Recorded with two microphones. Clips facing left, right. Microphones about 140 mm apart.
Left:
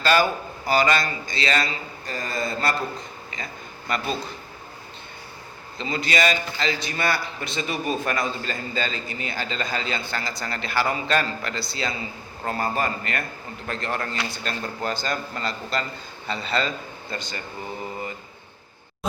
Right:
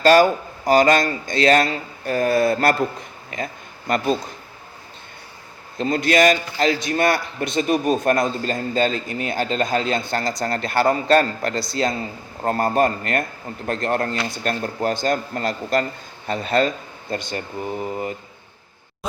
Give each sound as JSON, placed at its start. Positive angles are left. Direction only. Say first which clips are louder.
{"t": 0.0, "sound": "a man's voice", "louder": "right 7 dB", "side_deg": -45}
{"t": 5.7, "sound": "a man's voice", "louder": "right 7 dB", "side_deg": -50}